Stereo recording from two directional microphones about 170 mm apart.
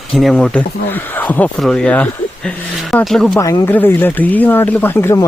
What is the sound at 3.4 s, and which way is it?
Speech, 20° left (ahead or behind).